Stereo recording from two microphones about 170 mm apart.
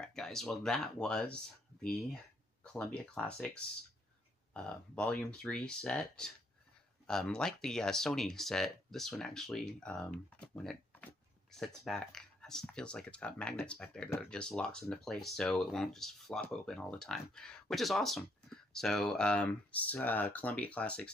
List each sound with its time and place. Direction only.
0.0 s speech: 5° left (ahead or behind)